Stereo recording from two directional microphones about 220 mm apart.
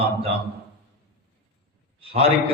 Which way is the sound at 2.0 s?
25° right (ahead or behind).